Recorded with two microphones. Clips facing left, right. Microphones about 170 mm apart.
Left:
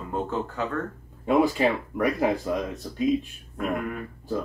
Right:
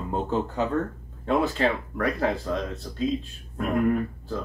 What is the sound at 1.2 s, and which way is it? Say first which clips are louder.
Speech: left 2 dB; 10° left (ahead or behind).